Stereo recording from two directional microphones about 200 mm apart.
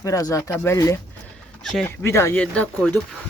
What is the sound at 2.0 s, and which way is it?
Speech, 15° left (ahead or behind).